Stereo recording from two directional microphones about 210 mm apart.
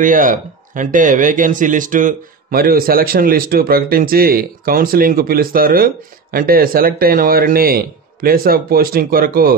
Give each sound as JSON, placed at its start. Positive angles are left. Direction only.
{"t": 0.0, "sound": "speech", "side_deg": -40}